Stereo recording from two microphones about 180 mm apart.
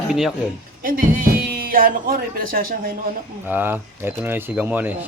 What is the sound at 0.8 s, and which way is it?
Speech, 50° right (ahead or behind).